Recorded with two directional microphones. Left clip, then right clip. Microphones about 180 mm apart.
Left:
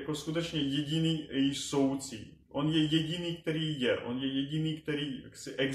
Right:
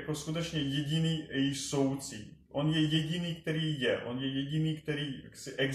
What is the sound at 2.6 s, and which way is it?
Speech, 45° left (ahead or behind).